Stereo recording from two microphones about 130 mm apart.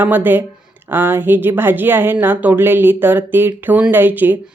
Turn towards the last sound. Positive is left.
turn(degrees=-15)  # may be behind; listen again after turning